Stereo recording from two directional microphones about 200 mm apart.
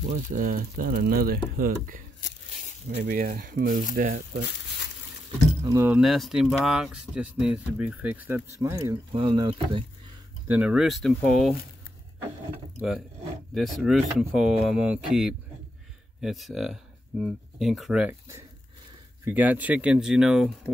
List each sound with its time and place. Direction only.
0.1 s speech: 45° right (ahead or behind)
5.6 s speech: 15° right (ahead or behind)
10.5 s speech: 5° right (ahead or behind)
13.6 s speech: centre (ahead or behind)
19.2 s speech: 10° right (ahead or behind)